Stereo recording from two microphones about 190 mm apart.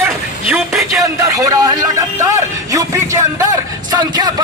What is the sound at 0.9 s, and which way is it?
Speech, 15° right (ahead or behind).